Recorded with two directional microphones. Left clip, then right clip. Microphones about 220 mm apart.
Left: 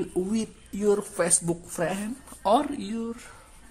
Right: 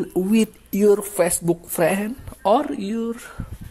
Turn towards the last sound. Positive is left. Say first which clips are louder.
# right 7 dB
turn(degrees=-20)  # may be behind; listen again after turning